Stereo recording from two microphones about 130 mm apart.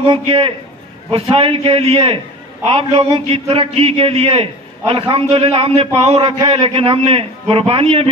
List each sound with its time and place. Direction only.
0.0 s a man's voice: 45° right (ahead or behind)